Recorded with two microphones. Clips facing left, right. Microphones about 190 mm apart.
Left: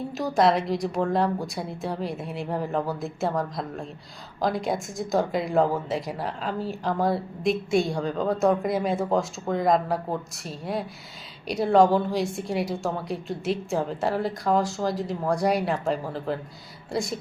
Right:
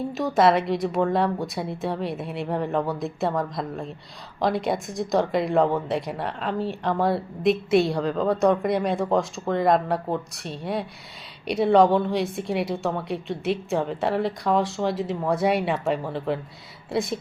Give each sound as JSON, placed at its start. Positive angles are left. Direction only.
{"t": 0.1, "sound": "a woman's voice", "side_deg": 0}